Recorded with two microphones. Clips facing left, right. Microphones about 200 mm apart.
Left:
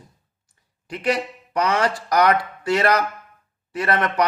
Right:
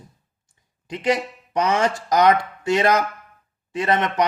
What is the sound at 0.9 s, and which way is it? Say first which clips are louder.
A man's voice: right 1 dB; 20° right (ahead or behind).